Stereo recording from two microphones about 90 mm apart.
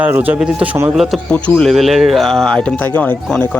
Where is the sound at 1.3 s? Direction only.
15° left (ahead or behind).